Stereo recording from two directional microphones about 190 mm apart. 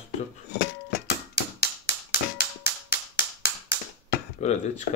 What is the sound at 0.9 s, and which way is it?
Music, 60° left (ahead or behind).